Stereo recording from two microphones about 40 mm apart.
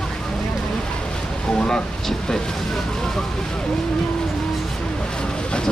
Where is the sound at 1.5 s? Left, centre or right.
Centre.